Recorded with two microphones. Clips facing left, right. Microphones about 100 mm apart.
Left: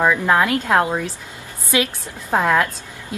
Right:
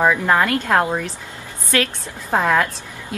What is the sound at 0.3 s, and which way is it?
A woman's voice, 15° left (ahead or behind).